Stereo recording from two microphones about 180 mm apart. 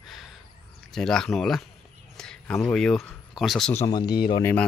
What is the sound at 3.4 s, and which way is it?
Speech, centre (ahead or behind).